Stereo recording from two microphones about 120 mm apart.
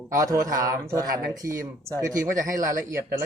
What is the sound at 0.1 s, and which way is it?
Speech, 25° right (ahead or behind).